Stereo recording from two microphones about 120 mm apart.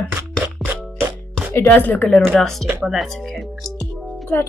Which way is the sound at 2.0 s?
Centre (ahead or behind).